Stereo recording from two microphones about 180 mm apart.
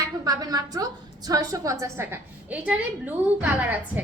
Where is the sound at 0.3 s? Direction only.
20° right (ahead or behind).